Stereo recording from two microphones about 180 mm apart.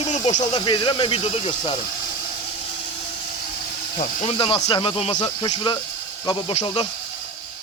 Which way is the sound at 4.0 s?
30° left (ahead or behind).